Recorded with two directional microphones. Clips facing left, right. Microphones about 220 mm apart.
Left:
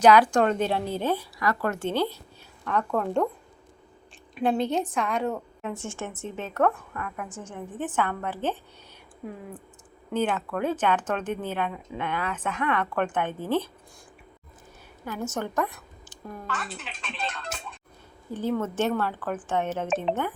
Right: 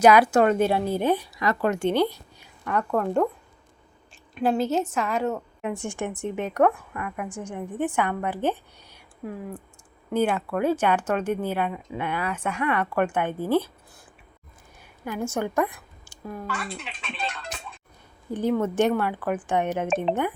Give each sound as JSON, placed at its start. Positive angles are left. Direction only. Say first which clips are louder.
{"t": 0.0, "sound": "speech", "louder": "right 2 dB", "side_deg": -10}
{"t": 4.4, "sound": "speech", "louder": "right 2 dB", "side_deg": 0}
{"t": 5.6, "sound": "speech", "louder": "right 5 dB", "side_deg": -15}
{"t": 10.1, "sound": "speech", "louder": "right 3 dB", "side_deg": -10}
{"t": 15.0, "sound": "a woman's voice", "louder": "right 3 dB", "side_deg": -10}
{"t": 16.5, "sound": "speech", "louder": "right 2 dB", "side_deg": 0}
{"t": 18.3, "sound": "speech", "louder": "right 4 dB", "side_deg": -15}